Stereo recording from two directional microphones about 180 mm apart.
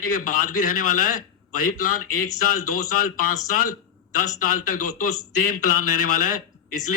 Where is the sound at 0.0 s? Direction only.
50° left (ahead or behind).